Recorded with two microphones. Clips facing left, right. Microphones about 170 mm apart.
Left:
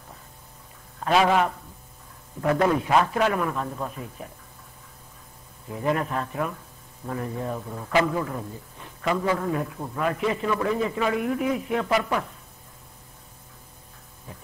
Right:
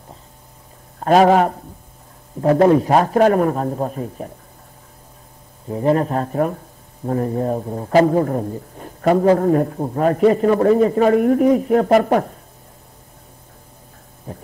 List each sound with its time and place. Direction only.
0.9 s a man's voice: 45° right (ahead or behind)
5.7 s a man's voice: 35° right (ahead or behind)
14.3 s a man's voice: 45° right (ahead or behind)